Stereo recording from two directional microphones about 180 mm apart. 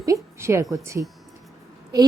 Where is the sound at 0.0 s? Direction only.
15° right (ahead or behind).